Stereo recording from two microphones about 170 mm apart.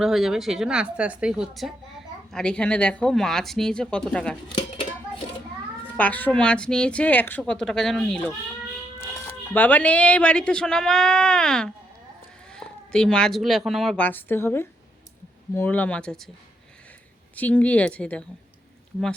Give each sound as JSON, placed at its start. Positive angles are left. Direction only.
{"t": 0.0, "sound": "speech", "side_deg": 0}
{"t": 4.5, "sound": "a sound", "side_deg": 30}
{"t": 6.0, "sound": "a woman's voice", "side_deg": 10}
{"t": 17.3, "sound": "a woman's voice", "side_deg": 10}